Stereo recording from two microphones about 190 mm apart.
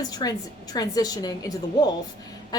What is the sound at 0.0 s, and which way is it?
A woman's voice, 20° left (ahead or behind).